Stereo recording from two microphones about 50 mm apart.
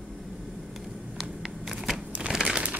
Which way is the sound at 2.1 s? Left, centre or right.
Right.